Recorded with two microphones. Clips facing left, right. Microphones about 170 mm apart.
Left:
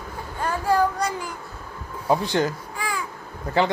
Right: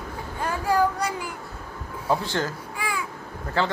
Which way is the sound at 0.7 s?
10° right (ahead or behind).